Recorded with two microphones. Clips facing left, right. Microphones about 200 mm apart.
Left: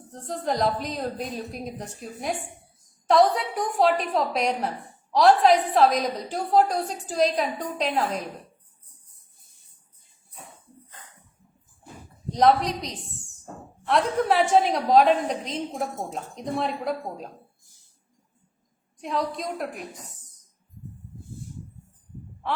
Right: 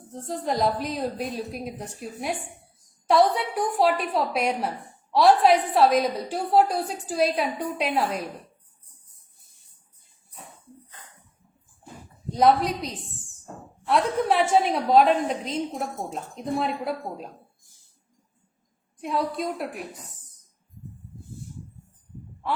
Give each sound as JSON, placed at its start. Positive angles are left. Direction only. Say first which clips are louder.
{"t": 0.1, "sound": "a woman's voice", "louder": "even", "side_deg": 0}
{"t": 12.3, "sound": "a woman's voice", "louder": "even", "side_deg": -5}
{"t": 18.9, "sound": "a woman's voice", "louder": "right 1 dB", "side_deg": -5}